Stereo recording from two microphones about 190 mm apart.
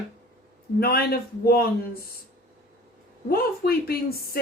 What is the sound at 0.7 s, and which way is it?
Speech, 55° left (ahead or behind).